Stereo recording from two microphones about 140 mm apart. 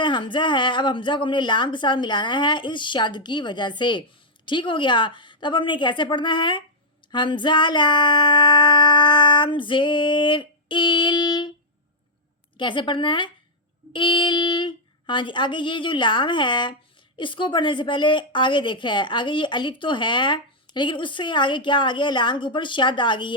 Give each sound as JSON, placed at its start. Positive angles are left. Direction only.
{"t": 0.0, "sound": "a woman's voice", "side_deg": 35}
{"t": 12.5, "sound": "a woman's voice", "side_deg": 35}